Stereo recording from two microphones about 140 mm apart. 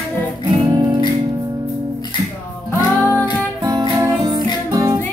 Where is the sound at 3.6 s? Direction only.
25° right (ahead or behind).